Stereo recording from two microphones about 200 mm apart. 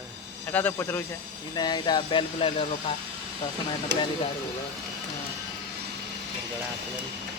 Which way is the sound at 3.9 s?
60° right (ahead or behind).